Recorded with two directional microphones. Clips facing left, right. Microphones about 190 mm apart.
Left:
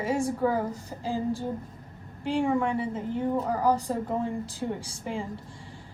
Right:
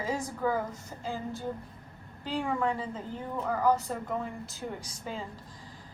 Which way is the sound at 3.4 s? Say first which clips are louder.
Right 2 dB; 35° left (ahead or behind).